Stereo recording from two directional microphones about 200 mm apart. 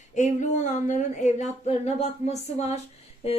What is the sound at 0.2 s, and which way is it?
A woman's voice, 35° left (ahead or behind).